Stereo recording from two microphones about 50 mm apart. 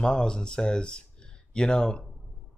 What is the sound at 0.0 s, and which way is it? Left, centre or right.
A man's voice, centre.